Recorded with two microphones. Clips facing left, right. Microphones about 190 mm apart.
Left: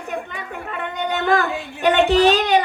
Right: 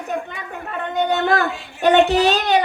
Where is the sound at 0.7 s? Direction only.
40° right (ahead or behind).